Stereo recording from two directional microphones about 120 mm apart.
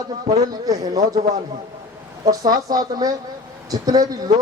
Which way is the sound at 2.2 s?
30° right (ahead or behind).